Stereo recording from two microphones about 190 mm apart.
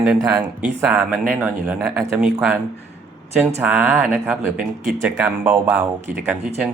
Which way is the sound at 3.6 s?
5° right (ahead or behind).